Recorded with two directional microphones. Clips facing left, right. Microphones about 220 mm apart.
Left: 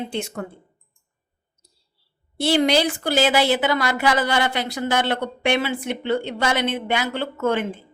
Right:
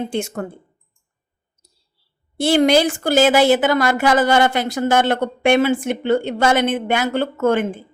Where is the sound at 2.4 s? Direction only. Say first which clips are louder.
Right 4 dB; 50° right (ahead or behind).